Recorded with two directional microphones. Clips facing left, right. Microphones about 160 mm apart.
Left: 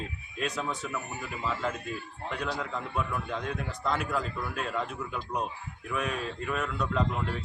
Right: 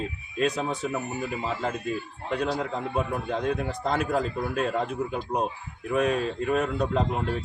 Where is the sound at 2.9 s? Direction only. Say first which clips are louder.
Right 4 dB; 40° right (ahead or behind).